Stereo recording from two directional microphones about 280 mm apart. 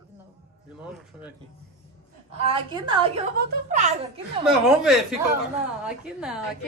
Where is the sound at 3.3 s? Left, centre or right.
Right.